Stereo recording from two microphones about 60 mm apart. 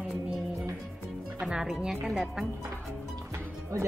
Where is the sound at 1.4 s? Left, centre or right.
Centre.